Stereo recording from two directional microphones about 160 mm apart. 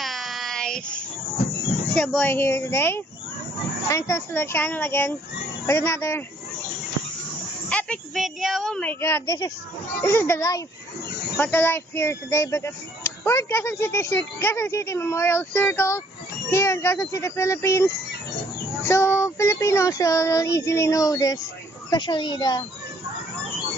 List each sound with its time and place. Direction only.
0.0 s child singing: centre (ahead or behind)
2.0 s speech: 10° left (ahead or behind)
7.7 s speech: 5° left (ahead or behind)
18.9 s speech: 15° left (ahead or behind)